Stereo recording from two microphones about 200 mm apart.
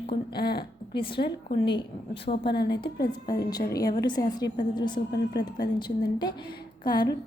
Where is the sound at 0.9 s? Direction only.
25° left (ahead or behind).